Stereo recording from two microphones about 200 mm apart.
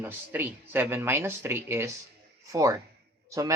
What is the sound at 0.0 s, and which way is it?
Speech, 10° right (ahead or behind).